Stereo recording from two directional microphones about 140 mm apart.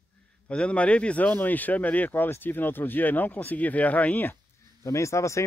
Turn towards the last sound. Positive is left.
turn(degrees=20)  # may be behind; listen again after turning